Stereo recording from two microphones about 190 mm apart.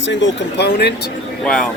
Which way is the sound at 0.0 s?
75° left (ahead or behind).